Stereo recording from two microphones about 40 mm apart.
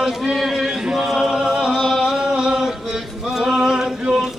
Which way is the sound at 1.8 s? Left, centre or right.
Centre.